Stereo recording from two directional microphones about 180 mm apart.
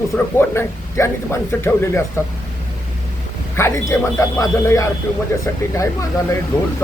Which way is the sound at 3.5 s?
15° left (ahead or behind).